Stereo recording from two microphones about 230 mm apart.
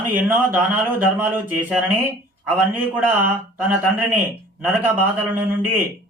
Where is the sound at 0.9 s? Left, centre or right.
Centre.